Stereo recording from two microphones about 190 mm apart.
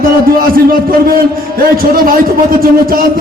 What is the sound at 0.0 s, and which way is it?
A man's voice, 50° right (ahead or behind).